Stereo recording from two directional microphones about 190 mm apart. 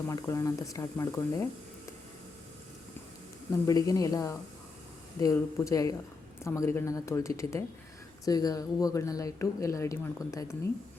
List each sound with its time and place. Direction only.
0.1 s speech: 15° left (ahead or behind)
3.5 s speech: 20° left (ahead or behind)